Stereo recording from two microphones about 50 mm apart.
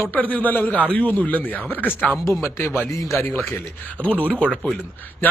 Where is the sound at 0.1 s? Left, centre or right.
Left.